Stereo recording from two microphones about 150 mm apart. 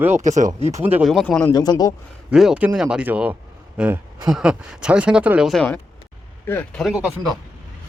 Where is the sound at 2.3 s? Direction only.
5° right (ahead or behind); by 6.8 s 15° left (ahead or behind).